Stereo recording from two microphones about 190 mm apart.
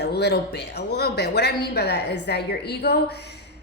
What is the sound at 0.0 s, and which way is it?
A woman's voice, 60° left (ahead or behind).